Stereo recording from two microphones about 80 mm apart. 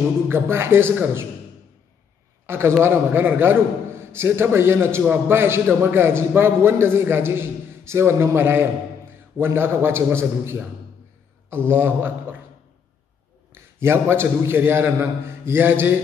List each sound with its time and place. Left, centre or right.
0.3 s a man's voice: right
2.4 s a man's voice: right
13.5 s a man's voice: right